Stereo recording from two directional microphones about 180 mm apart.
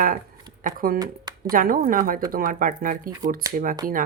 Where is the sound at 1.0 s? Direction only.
20° right (ahead or behind).